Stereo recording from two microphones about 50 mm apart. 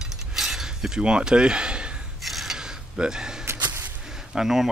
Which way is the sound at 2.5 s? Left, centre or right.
Centre.